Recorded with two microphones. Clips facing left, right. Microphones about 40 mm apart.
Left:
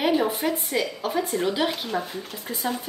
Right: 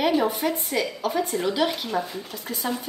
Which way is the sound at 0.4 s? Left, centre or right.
Centre.